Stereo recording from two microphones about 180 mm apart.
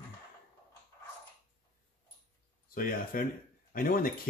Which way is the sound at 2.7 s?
50° left (ahead or behind).